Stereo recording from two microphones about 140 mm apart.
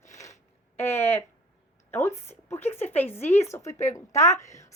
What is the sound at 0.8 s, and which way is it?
A woman's voice, 15° left (ahead or behind).